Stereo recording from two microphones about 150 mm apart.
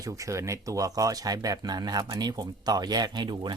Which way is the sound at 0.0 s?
20° right (ahead or behind).